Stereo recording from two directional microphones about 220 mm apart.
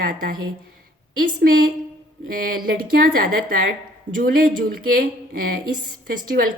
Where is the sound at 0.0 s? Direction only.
40° right (ahead or behind).